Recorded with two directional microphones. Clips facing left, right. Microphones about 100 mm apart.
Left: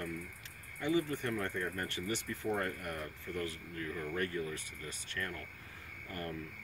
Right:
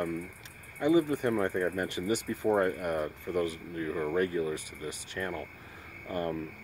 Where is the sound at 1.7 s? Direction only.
15° right (ahead or behind).